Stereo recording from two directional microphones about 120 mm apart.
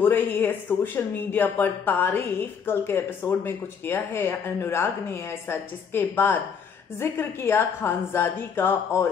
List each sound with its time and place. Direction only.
0.0 s a woman's voice: 15° left (ahead or behind)